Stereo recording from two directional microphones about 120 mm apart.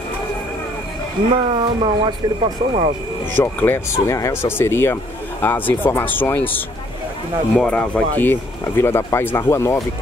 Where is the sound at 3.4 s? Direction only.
15° left (ahead or behind).